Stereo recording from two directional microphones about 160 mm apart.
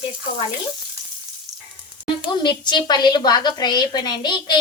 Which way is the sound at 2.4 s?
30° left (ahead or behind).